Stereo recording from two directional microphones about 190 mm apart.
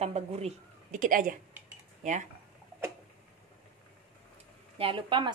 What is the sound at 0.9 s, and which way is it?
Speech, 45° right (ahead or behind).